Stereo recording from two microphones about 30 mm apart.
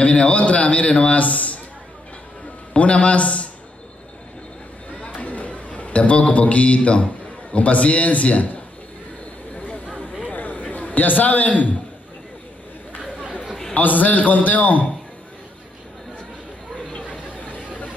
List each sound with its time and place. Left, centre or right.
0.0 s a man's voice: left
2.7 s a man's voice: left
5.1 s a sound: left
7.5 s a man's voice: left
10.3 s a sound: left
13.0 s chatter: right
13.7 s a man's voice: left